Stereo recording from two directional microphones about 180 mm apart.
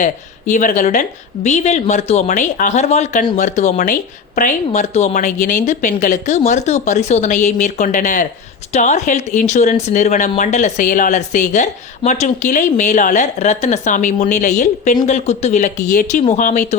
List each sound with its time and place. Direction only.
0.0 s speech: 45° left (ahead or behind)